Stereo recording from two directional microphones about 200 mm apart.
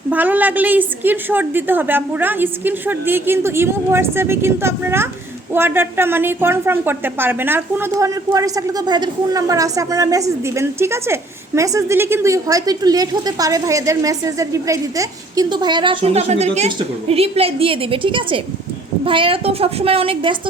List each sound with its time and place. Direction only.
0.1 s a woman's voice: 10° right (ahead or behind); by 20.3 s 30° right (ahead or behind)